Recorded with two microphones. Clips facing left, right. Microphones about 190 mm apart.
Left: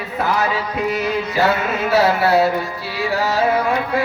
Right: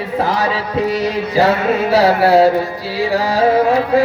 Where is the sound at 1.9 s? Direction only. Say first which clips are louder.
Right 3 dB; 35° right (ahead or behind).